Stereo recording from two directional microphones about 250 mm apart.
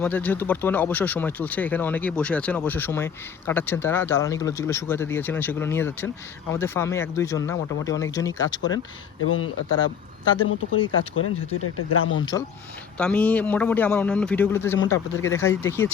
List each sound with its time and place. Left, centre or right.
0.0 s speech: centre
9.2 s speech: left
13.0 s a man's voice: centre